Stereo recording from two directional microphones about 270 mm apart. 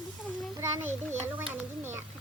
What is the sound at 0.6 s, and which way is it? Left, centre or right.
A child's voice, centre.